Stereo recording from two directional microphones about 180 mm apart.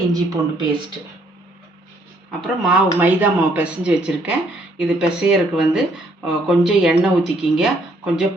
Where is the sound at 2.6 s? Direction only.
5° right (ahead or behind).